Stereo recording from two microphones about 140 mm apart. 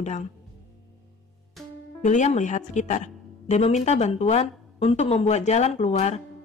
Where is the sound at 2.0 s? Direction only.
55° left (ahead or behind).